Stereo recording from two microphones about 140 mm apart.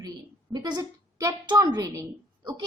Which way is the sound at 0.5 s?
30° right (ahead or behind).